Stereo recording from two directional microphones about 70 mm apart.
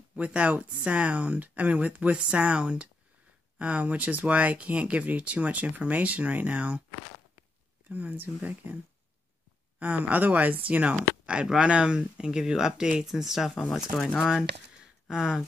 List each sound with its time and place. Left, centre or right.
0.1 s speech: centre
7.9 s speech: right
9.8 s speech: right; by 15.4 s centre